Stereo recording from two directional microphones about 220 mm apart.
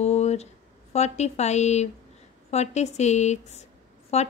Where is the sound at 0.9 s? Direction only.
30° left (ahead or behind).